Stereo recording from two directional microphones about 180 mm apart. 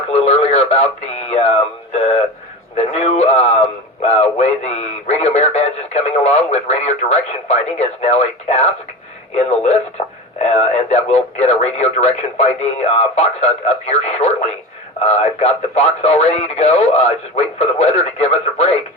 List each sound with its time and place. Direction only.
0.1 s radio: 35° left (ahead or behind)
2.7 s speech: 35° left (ahead or behind)